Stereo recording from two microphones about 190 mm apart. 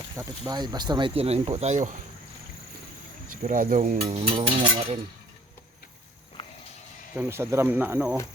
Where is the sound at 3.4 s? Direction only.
45° right (ahead or behind).